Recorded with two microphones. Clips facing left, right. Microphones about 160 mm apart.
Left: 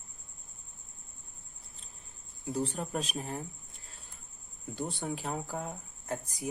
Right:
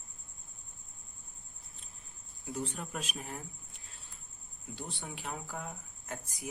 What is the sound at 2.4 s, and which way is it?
Speech, 35° left (ahead or behind).